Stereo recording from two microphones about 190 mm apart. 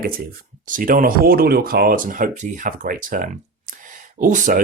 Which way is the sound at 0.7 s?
45° right (ahead or behind).